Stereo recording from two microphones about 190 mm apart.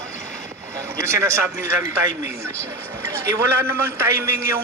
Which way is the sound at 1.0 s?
15° right (ahead or behind).